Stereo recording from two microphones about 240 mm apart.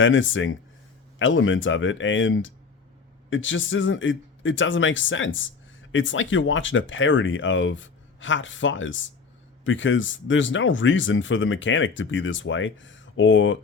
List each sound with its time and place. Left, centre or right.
0.0 s speech: left